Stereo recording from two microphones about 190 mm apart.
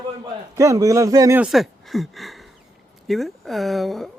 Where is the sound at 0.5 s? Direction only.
15° right (ahead or behind).